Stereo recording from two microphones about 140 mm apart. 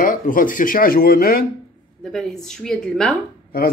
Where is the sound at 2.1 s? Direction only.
5° left (ahead or behind).